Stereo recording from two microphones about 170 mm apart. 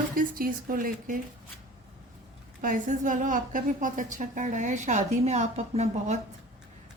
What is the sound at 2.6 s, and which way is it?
A woman's voice, 50° right (ahead or behind).